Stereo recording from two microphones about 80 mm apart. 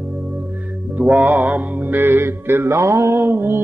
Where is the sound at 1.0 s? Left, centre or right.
Right.